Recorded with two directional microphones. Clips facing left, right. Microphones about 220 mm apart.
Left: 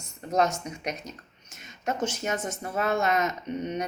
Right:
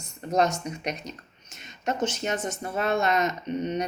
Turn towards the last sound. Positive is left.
turn(degrees=10)  # may be behind; listen again after turning